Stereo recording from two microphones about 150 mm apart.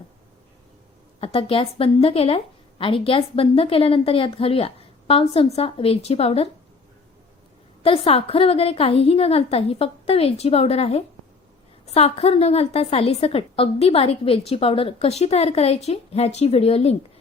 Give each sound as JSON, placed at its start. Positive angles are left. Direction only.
{"t": 1.2, "sound": "a woman's voice", "side_deg": 40}
{"t": 7.8, "sound": "a woman's voice", "side_deg": 40}